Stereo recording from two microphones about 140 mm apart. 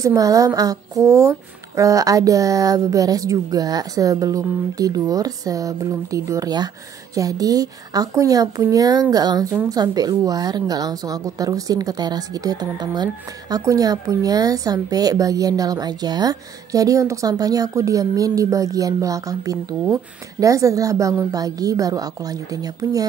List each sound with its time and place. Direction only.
0.0 s a woman's voice: 25° right (ahead or behind)